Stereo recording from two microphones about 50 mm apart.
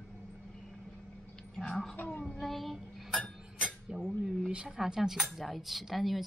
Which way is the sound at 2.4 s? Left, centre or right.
Centre.